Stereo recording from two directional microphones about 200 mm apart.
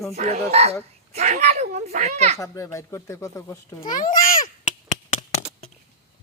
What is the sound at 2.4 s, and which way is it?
A child's voice, 15° left (ahead or behind).